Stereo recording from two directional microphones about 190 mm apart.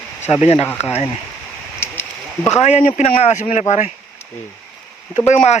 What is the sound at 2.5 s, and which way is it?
Speech, 35° left (ahead or behind).